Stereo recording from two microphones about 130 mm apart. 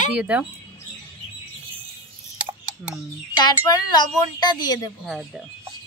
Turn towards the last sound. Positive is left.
turn(degrees=30)  # may be behind; listen again after turning